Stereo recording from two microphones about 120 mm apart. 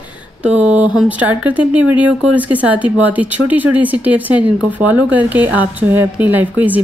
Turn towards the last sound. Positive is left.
turn(degrees=-15)  # may be behind; listen again after turning